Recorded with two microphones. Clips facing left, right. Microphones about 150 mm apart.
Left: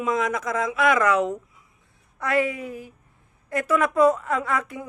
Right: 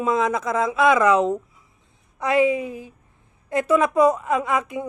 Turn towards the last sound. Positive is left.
turn(degrees=-20)  # may be behind; listen again after turning